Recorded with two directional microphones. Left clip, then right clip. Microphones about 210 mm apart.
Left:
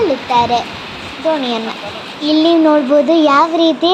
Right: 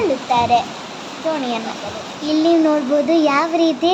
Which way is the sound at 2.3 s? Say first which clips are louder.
Left 4 dB; 20° left (ahead or behind).